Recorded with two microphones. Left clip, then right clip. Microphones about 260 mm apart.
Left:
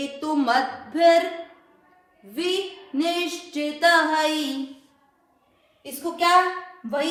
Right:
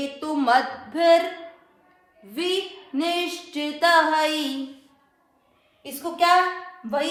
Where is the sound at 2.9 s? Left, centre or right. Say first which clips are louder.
Even; right.